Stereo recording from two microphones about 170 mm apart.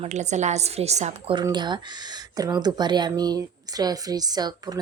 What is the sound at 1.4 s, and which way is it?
A woman's voice, 25° right (ahead or behind).